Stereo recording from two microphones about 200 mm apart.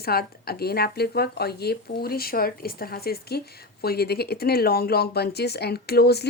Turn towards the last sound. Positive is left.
turn(degrees=55)  # may be behind; listen again after turning